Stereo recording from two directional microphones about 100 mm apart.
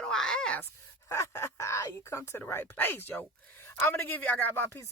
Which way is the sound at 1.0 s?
30° left (ahead or behind).